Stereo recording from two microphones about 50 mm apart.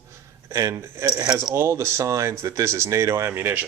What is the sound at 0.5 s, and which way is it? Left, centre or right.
Speech, right.